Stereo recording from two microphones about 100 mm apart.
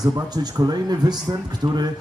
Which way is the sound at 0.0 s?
40° right (ahead or behind).